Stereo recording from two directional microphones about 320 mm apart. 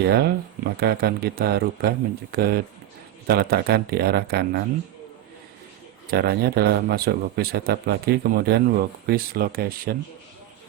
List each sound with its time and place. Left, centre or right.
0.0 s speech: right
6.1 s speech: right